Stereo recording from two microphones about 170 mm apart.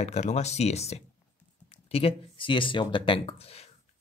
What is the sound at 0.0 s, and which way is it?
Speech, 40° left (ahead or behind).